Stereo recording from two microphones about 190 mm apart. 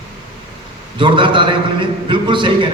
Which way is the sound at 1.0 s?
25° right (ahead or behind).